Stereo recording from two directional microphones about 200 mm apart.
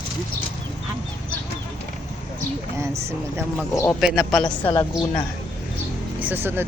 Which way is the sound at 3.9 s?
Centre (ahead or behind).